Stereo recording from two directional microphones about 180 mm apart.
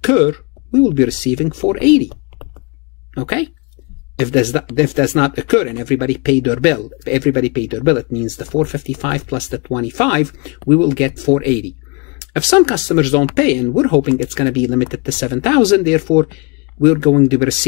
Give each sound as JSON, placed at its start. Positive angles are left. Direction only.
{"t": 0.0, "sound": "speech", "side_deg": 30}
{"t": 3.2, "sound": "speech", "side_deg": 35}
{"t": 12.4, "sound": "speech", "side_deg": 35}